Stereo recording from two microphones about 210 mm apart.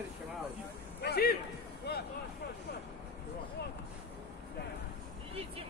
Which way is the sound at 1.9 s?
50° left (ahead or behind).